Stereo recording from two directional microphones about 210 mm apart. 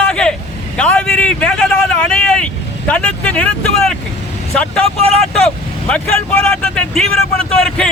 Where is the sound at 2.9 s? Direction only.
5° left (ahead or behind).